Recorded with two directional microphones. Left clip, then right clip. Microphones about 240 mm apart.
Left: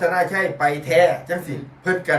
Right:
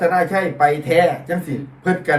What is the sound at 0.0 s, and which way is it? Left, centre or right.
Speech, centre.